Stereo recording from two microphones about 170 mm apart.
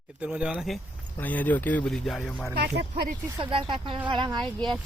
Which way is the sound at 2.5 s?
75° right (ahead or behind).